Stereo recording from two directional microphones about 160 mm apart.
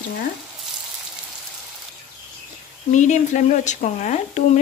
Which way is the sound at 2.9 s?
50° left (ahead or behind).